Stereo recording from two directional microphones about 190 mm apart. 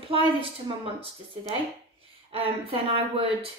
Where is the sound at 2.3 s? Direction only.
30° right (ahead or behind).